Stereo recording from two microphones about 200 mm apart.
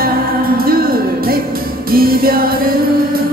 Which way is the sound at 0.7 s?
50° right (ahead or behind).